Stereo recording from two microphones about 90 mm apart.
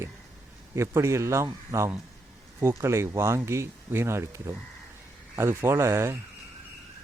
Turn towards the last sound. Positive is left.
turn(degrees=-30)  # may be behind; listen again after turning